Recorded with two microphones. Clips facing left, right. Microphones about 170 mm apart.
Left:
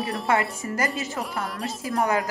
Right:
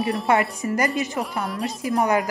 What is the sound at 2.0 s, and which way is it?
Speech, 20° right (ahead or behind).